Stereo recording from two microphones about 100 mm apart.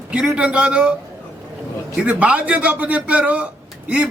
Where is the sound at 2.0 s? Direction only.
15° right (ahead or behind).